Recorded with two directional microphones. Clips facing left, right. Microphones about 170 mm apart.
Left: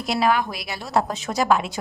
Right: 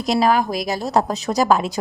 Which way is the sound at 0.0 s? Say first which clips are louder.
Right 4 dB; 40° right (ahead or behind).